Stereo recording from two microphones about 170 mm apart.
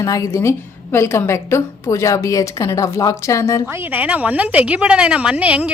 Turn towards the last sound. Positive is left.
turn(degrees=-10)  # may be behind; listen again after turning